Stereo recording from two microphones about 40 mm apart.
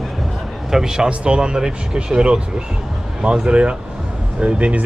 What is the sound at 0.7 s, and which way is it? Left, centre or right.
Speech, centre.